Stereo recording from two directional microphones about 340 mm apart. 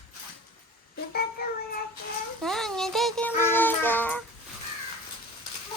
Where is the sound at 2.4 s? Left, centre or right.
Centre.